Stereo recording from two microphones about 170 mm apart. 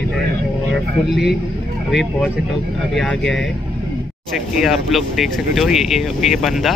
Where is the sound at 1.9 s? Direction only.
Centre (ahead or behind).